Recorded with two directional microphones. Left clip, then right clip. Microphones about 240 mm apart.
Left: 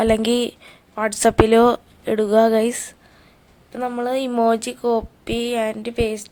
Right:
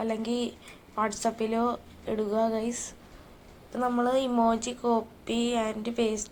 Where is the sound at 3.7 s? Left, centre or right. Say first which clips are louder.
Left 4 dB; left.